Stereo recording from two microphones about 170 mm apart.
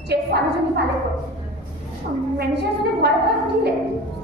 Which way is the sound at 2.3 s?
75° right (ahead or behind).